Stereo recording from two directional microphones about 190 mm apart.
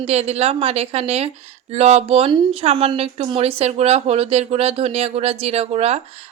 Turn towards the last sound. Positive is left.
turn(degrees=-35)  # may be behind; listen again after turning